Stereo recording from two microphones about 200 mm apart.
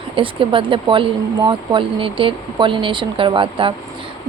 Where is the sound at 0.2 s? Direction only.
25° right (ahead or behind).